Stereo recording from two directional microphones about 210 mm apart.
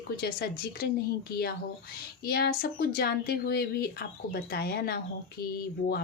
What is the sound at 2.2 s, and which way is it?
Speech, 45° left (ahead or behind).